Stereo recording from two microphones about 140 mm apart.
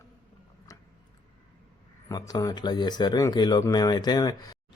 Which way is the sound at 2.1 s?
30° left (ahead or behind).